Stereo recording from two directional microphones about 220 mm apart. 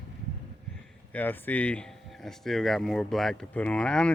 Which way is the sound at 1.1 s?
10° left (ahead or behind).